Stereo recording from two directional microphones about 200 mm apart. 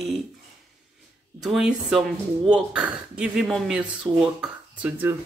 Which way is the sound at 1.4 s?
Centre (ahead or behind).